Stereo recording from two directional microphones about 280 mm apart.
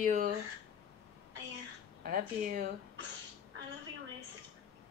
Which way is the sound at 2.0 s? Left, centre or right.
Right.